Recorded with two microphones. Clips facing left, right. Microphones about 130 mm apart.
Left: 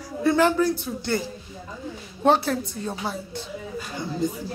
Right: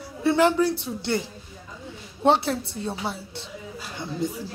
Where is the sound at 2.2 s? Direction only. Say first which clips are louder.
Left 1 dB; 25° right (ahead or behind).